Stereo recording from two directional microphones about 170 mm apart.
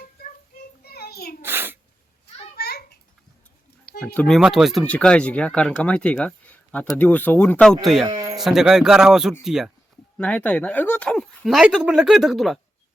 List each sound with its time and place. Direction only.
0.9 s a sound: 65° left (ahead or behind)
1.4 s sneeze: 15° right (ahead or behind)
2.6 s a sound: 70° left (ahead or behind)
4.0 s speech: 10° left (ahead or behind)
4.4 s speech: 5° right (ahead or behind)
8.0 s sheep: 20° right (ahead or behind)
8.4 s speech: 5° right (ahead or behind)
10.2 s speech: 10° left (ahead or behind)